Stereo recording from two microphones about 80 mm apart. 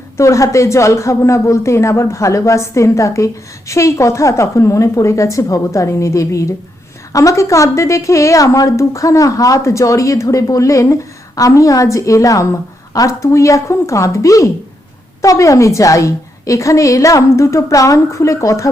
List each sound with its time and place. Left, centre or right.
0.2 s a woman's voice: left